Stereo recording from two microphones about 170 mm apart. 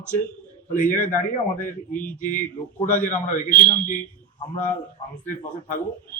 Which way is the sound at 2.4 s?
50° left (ahead or behind).